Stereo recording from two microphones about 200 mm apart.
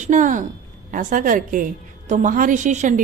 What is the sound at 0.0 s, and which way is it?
A woman's voice, 40° right (ahead or behind).